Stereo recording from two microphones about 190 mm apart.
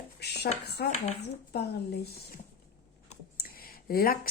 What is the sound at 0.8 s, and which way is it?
Speech, 60° left (ahead or behind).